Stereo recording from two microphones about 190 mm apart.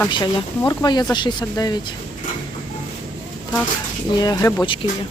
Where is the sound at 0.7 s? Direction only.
20° left (ahead or behind).